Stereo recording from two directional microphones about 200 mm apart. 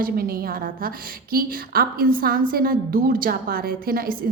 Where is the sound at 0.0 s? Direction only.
45° right (ahead or behind).